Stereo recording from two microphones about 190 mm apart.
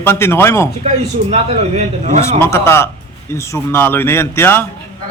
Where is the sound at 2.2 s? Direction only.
15° left (ahead or behind).